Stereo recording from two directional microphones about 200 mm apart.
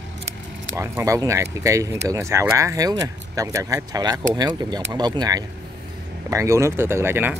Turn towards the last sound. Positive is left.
turn(degrees=-10)  # may be behind; listen again after turning